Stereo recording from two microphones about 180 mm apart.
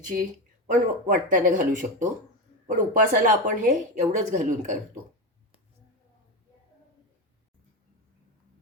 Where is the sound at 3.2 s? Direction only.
45° right (ahead or behind).